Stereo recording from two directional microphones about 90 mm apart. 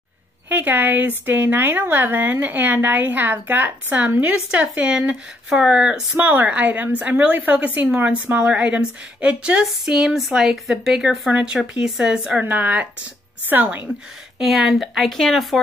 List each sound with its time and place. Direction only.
0.5 s speech: 20° right (ahead or behind)
6.1 s a woman's voice: 20° right (ahead or behind)
14.4 s speech: centre (ahead or behind)